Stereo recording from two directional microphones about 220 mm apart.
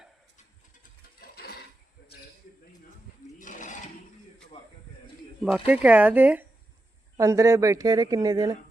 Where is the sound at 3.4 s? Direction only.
35° left (ahead or behind).